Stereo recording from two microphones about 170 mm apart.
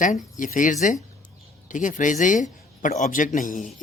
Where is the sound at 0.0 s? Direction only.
50° left (ahead or behind).